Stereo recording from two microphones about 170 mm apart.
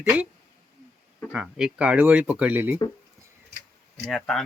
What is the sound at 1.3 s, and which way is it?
Speech, 5° right (ahead or behind).